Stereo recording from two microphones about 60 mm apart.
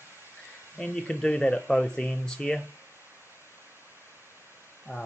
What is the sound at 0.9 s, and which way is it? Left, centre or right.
Speech, centre.